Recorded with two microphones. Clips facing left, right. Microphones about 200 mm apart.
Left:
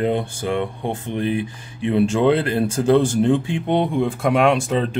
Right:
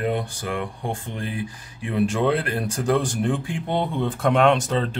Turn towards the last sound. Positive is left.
turn(degrees=15)  # may be behind; listen again after turning